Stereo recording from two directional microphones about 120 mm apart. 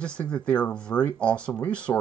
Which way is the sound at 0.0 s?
10° left (ahead or behind).